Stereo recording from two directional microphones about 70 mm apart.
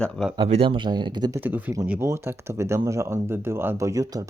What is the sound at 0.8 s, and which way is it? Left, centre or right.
Speech, right.